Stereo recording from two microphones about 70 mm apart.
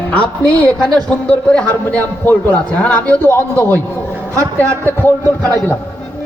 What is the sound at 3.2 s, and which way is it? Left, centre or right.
Speech, left.